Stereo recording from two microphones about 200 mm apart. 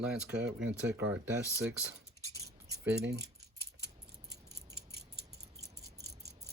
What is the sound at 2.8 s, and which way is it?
Speech, 60° right (ahead or behind).